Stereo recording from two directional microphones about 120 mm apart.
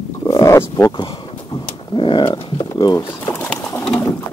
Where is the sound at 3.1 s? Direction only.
20° left (ahead or behind).